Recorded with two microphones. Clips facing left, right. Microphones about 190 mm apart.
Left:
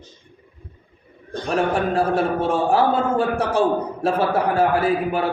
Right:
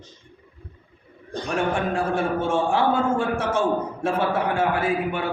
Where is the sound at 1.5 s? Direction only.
35° left (ahead or behind).